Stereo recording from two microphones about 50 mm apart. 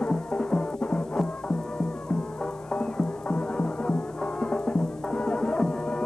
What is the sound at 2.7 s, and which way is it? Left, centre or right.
Music, centre.